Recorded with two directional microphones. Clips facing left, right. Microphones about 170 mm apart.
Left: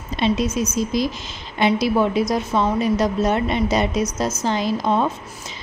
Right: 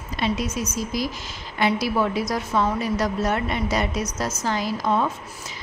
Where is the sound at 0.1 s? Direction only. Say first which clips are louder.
Left 5 dB; 25° left (ahead or behind).